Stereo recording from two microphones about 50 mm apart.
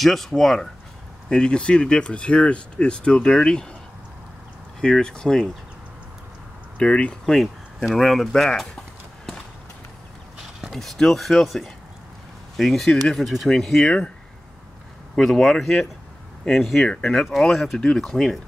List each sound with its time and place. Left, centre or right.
0.0 s speech: centre
1.3 s speech: centre
4.7 s speech: centre
6.8 s speech: left
7.9 s speech: centre
10.7 s speech: centre
13.8 s speech: centre
15.1 s speech: centre
16.8 s speech: left
17.1 s speech: centre